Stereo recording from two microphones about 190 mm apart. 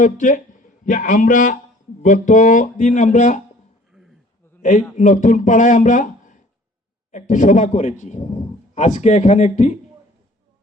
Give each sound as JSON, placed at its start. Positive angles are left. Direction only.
{"t": 0.0, "sound": "a man's voice", "side_deg": 40}
{"t": 4.6, "sound": "a man's voice", "side_deg": 40}